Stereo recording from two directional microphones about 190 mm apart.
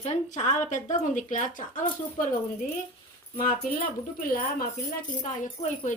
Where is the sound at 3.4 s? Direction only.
45° left (ahead or behind).